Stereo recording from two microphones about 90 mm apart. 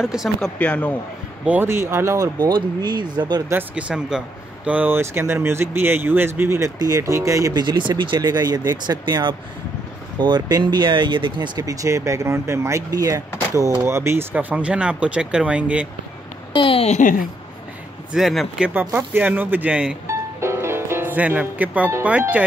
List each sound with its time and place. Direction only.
0.0 s speech: 5° right (ahead or behind)
0.4 s speech: 15° left (ahead or behind)
1.4 s speech: 15° right (ahead or behind)
1.7 s speech: 30° right (ahead or behind)
2.4 s speech: 55° right (ahead or behind)
3.7 s speech: 10° right (ahead or behind); by 6.7 s 25° right (ahead or behind)
6.8 s speech: 40° right (ahead or behind)
7.6 s speech: 55° right (ahead or behind)
11.6 s speech: 40° right (ahead or behind)
14.3 s speech: 15° right (ahead or behind)
16.5 s a sound: 75° left (ahead or behind)
18.1 s speech: centre (ahead or behind)
18.7 s speech: 25° right (ahead or behind)
20.1 s music: 30° right (ahead or behind)